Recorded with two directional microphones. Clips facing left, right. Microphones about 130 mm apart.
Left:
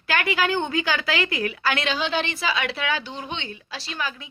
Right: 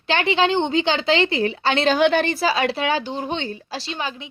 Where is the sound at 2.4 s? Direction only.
35° right (ahead or behind).